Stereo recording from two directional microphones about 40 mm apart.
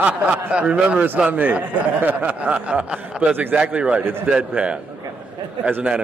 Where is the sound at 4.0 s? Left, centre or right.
Right.